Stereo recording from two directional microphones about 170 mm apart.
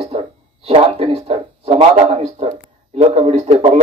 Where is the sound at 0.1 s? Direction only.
35° right (ahead or behind).